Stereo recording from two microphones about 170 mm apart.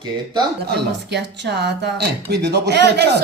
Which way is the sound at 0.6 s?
75° right (ahead or behind).